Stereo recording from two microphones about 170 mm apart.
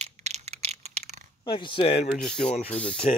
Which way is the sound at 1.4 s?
30° left (ahead or behind).